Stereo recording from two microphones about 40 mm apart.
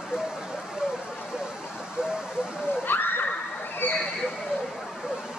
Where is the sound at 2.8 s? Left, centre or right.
Left.